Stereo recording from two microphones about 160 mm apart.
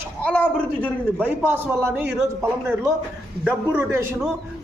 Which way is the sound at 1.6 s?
15° right (ahead or behind).